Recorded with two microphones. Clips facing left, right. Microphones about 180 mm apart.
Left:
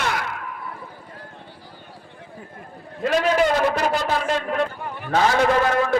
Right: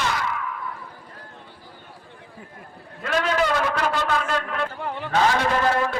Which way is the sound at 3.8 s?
40° left (ahead or behind).